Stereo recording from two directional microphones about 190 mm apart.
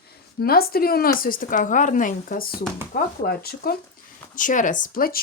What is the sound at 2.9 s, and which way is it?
Speech, 55° left (ahead or behind).